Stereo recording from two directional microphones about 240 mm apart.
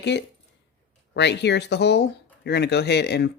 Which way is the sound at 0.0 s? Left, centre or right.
Left.